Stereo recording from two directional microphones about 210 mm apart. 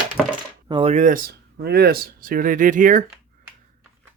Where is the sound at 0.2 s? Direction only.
Centre (ahead or behind).